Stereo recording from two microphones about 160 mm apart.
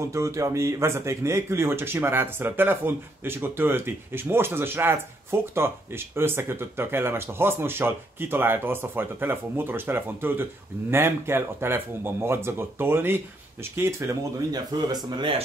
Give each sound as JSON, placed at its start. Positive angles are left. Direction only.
{"t": 0.0, "sound": "speech", "side_deg": -20}